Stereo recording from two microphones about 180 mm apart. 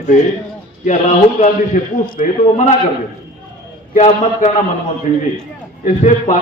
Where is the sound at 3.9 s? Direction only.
40° left (ahead or behind).